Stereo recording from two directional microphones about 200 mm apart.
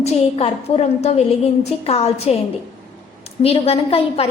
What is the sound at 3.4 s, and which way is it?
Speech, 30° left (ahead or behind).